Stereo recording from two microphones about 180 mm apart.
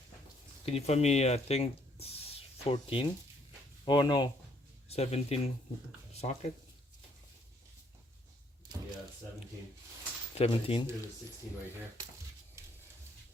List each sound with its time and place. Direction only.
0.6 s speech: 35° left (ahead or behind)
4.9 s speech: 35° left (ahead or behind)
10.3 s speech: 30° left (ahead or behind)